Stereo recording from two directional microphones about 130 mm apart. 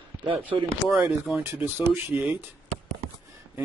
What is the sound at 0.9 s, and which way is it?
Speech, centre (ahead or behind).